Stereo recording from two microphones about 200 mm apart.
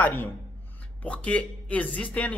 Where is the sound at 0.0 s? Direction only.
10° left (ahead or behind).